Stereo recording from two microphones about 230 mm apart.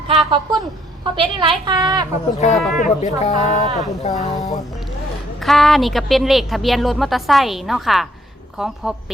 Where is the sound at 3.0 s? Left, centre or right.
Left.